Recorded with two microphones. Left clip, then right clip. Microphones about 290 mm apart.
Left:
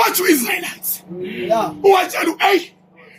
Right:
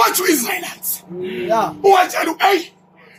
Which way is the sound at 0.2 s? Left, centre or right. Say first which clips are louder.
Left 1 dB; centre.